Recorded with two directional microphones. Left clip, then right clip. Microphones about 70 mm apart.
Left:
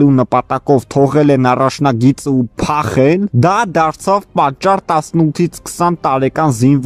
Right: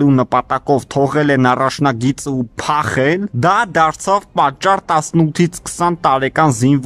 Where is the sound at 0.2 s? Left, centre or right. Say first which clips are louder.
Left 1 dB; left.